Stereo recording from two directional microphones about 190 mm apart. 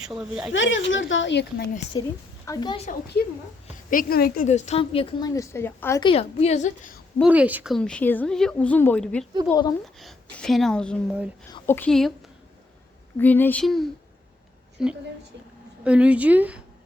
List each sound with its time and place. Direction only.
0.2 s a woman's voice: centre (ahead or behind)
0.5 s speech: 80° left; by 1.6 s 65° left (ahead or behind)
2.0 s a woman's voice: 20° left (ahead or behind)
3.8 s a woman's voice: 50° left (ahead or behind)
4.4 s a woman's voice: 35° left (ahead or behind)
5.3 s a woman's voice: 15° left (ahead or behind)
6.0 s a woman's voice: 30° left (ahead or behind)
7.2 s a woman's voice: 5° right (ahead or behind)
9.5 s a woman's voice: 20° left (ahead or behind)
10.0 s a woman's voice: centre (ahead or behind)
13.1 s a woman's voice: 10° left (ahead or behind); by 16.6 s 10° right (ahead or behind)